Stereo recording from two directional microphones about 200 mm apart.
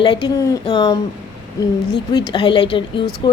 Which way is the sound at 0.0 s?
25° left (ahead or behind).